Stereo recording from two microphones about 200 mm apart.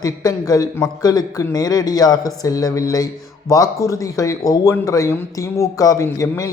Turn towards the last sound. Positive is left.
turn(degrees=15)  # may be behind; listen again after turning